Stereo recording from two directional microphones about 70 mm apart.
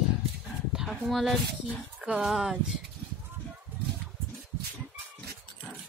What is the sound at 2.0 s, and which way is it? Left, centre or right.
Speech, centre.